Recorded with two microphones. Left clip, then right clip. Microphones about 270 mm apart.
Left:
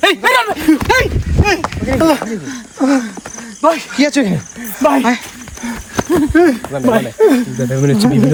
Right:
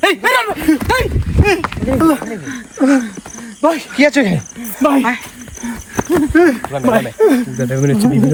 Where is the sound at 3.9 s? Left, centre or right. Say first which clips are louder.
Right 2 dB; right.